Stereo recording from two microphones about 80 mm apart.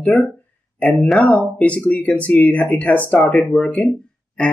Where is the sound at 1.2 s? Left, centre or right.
Centre.